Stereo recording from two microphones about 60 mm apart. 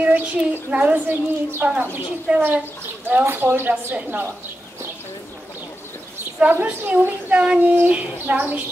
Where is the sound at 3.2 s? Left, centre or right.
Right.